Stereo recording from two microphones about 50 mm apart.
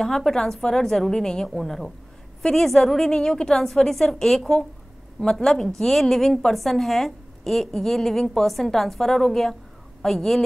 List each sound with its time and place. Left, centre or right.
0.0 s a woman's voice: centre
1.5 s a woman's voice: centre